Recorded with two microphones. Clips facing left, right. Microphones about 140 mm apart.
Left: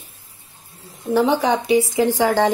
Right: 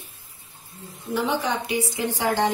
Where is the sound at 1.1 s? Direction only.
90° left.